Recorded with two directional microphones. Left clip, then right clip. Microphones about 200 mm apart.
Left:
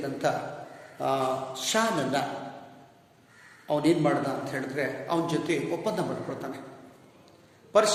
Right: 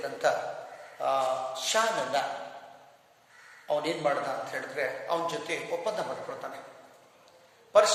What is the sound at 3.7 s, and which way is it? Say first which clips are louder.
A man's voice: left 3 dB; 15° left (ahead or behind).